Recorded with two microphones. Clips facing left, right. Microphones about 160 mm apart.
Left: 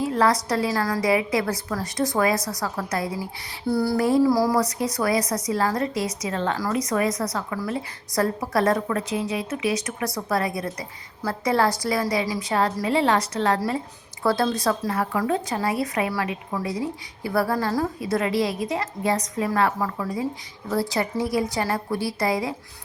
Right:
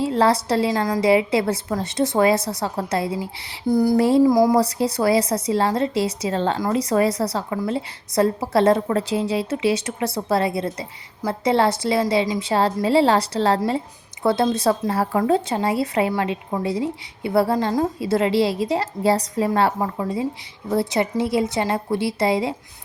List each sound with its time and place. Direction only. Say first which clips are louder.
0.0 s a woman's voice: right 3 dB; 30° right (ahead or behind)
3.7 s a woman's voice: right 4 dB; 15° right (ahead or behind)
4.6 s a woman's voice: right 4 dB; 30° right (ahead or behind)